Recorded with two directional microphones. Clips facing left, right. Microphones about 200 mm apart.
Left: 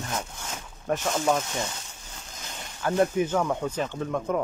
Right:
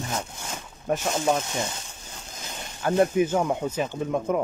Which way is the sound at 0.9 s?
15° right (ahead or behind).